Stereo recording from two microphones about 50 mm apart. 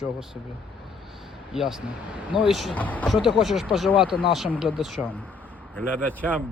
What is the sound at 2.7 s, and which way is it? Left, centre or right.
Speech, left.